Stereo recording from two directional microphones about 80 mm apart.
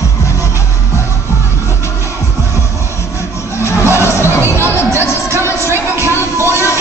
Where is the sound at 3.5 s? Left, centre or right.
Left.